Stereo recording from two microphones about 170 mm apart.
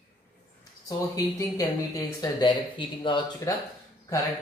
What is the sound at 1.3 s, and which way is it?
Speech, 20° left (ahead or behind).